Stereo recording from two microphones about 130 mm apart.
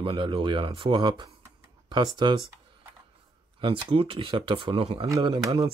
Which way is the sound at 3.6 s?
40° right (ahead or behind).